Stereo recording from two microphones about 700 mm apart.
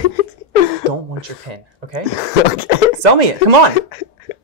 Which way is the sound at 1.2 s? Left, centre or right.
Right.